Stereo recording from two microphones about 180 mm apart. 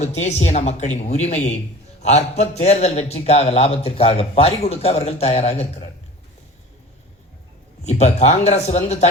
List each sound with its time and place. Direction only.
0.0 s a man's voice: 40° left (ahead or behind)
7.9 s a man's voice: 40° left (ahead or behind)